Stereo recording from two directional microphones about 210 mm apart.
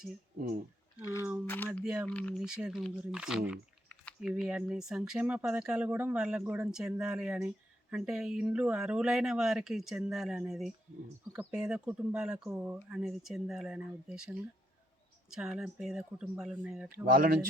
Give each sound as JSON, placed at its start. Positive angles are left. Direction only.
{"t": 1.5, "sound": "speech", "side_deg": 10}
{"t": 1.8, "sound": "speech", "side_deg": -5}
{"t": 2.1, "sound": "speech", "side_deg": 5}
{"t": 2.5, "sound": "speech", "side_deg": -5}
{"t": 3.8, "sound": "typing", "side_deg": 5}
{"t": 4.3, "sound": "speech", "side_deg": -5}
{"t": 17.1, "sound": "speech", "side_deg": -40}